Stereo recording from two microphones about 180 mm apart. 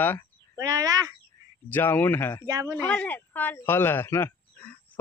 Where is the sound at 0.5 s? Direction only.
20° right (ahead or behind).